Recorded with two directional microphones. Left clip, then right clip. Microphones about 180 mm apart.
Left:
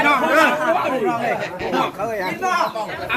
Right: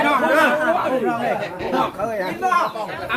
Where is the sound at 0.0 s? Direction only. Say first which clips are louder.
Left 1 dB; 80° right.